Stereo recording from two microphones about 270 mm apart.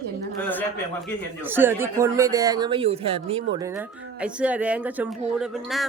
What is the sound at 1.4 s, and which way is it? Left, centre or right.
Speech, centre.